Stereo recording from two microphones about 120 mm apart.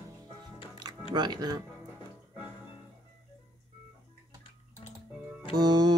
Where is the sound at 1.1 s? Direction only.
35° right (ahead or behind).